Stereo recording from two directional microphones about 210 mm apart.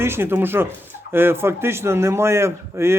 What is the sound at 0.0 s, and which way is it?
A man's voice, 10° right (ahead or behind).